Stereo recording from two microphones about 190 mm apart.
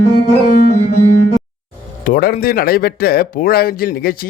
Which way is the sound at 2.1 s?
50° left (ahead or behind).